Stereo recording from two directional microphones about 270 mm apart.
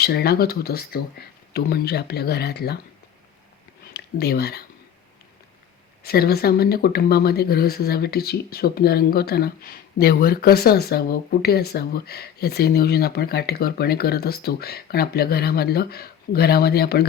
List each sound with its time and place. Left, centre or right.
0.0 s speech: left
3.9 s speech: left
6.0 s speech: left